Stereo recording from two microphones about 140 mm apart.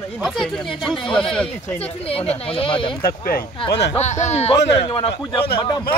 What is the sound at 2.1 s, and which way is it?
Speech, 45° left (ahead or behind).